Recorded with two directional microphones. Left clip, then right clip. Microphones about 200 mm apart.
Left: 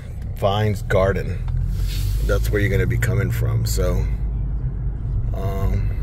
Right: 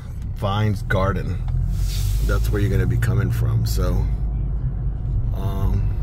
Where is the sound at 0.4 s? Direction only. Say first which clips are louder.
Left 5 dB; 20° right (ahead or behind).